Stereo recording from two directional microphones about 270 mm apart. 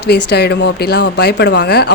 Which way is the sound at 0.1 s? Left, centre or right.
Left.